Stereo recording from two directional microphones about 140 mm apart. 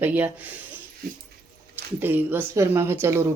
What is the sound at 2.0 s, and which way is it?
A woman's voice, 15° right (ahead or behind).